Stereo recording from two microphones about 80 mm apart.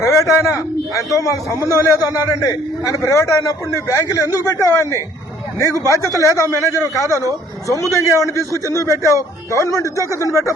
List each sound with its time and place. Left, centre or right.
0.0 s a man's voice: left
6.1 s a man's voice: left
7.1 s speech: right
8.0 s a man's voice: left